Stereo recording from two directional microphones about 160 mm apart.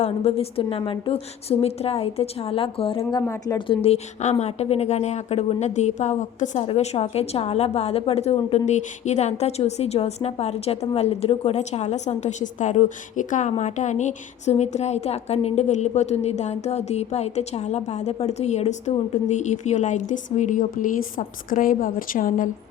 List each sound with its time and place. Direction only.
0.0 s a woman's voice: 40° left (ahead or behind)
3.0 s a woman's voice: 20° left (ahead or behind)
3.8 s speech: 45° left (ahead or behind)